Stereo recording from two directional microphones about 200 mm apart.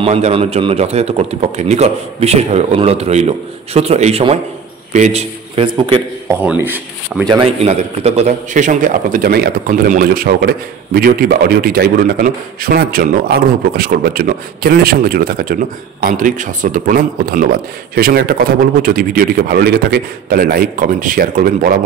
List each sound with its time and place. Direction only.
0.0 s a man's voice: 30° right (ahead or behind)
6.4 s speech: 10° right (ahead or behind)
7.2 s a man's voice: 25° right (ahead or behind); by 21.7 s 45° right (ahead or behind)